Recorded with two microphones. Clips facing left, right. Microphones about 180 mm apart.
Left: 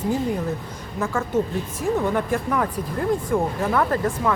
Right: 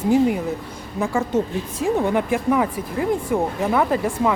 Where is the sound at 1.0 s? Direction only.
15° right (ahead or behind).